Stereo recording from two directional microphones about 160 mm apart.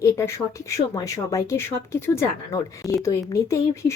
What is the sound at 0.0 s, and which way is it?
A woman's voice, 20° left (ahead or behind).